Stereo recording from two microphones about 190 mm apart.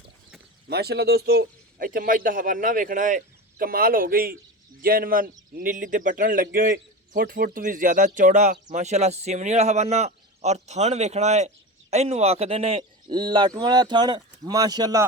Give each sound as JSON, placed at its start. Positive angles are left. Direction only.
{"t": 0.7, "sound": "a man's voice", "side_deg": -55}